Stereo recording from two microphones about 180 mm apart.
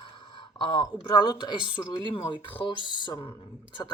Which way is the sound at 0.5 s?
25° left (ahead or behind).